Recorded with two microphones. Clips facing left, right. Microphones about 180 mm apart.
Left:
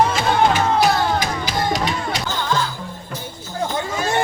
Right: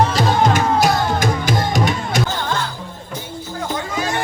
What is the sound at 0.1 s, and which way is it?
Music, 40° right (ahead or behind).